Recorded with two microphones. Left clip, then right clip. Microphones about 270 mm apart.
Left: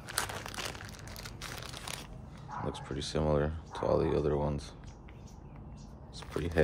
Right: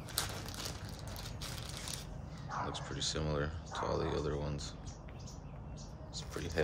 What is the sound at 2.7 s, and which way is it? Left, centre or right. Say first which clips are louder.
Speech: left 2 dB; left.